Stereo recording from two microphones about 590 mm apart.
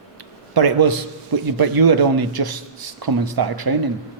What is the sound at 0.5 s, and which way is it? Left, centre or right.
A man's voice, right.